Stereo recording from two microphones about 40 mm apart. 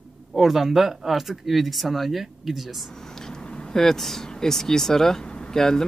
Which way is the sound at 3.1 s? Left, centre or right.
Centre.